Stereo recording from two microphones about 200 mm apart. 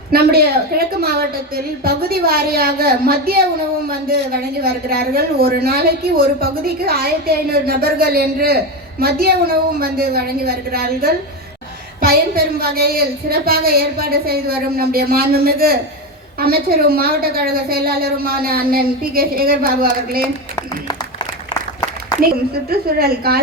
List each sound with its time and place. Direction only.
0.1 s speech: 50° right (ahead or behind)
22.7 s speech: 50° right (ahead or behind)